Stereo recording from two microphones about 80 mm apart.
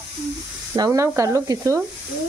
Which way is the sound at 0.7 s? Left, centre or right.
Right.